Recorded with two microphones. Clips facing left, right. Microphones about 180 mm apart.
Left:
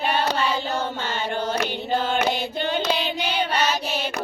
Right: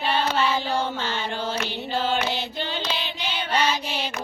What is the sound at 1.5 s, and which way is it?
Music, 55° left (ahead or behind).